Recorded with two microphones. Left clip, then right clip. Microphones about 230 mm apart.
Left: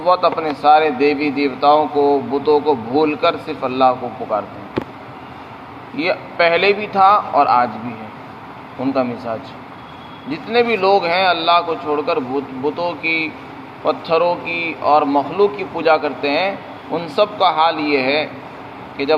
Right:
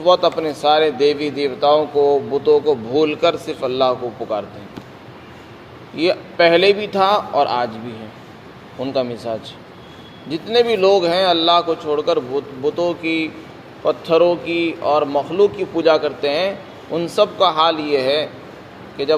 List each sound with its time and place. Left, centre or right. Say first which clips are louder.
0.0 s a man's voice: even; right
2.0 s speech: even; right
2.3 s a man's voice: even; right
6.0 s a man's voice: right 1 dB; right
8.8 s a man's voice: left 1 dB; right